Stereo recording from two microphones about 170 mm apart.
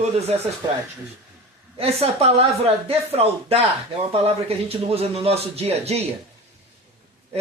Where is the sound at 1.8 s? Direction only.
35° right (ahead or behind).